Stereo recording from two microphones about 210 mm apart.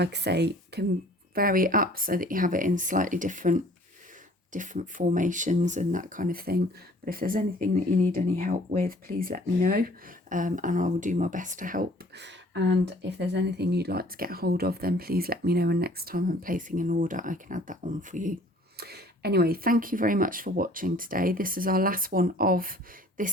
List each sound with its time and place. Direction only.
0.0 s speech: 55° right (ahead or behind)
18.8 s speech: 50° right (ahead or behind)